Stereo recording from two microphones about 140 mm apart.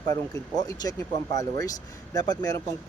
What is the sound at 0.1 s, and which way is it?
Speech, 25° left (ahead or behind).